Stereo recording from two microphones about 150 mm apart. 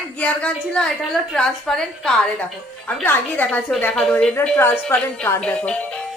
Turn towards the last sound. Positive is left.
turn(degrees=5)  # may be behind; listen again after turning